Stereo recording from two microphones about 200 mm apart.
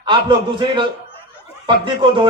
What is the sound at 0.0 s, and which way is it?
A man's voice, 25° right (ahead or behind).